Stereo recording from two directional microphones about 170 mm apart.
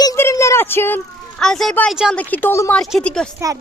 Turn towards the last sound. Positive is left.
turn(degrees=5)  # may be behind; listen again after turning